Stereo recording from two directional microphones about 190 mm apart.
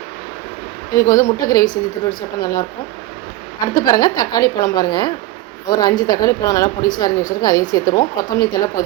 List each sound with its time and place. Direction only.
0.9 s a woman's voice: 20° left (ahead or behind)
3.8 s a woman's voice: 20° left (ahead or behind)